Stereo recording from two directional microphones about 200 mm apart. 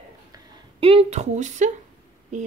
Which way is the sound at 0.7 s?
30° right (ahead or behind).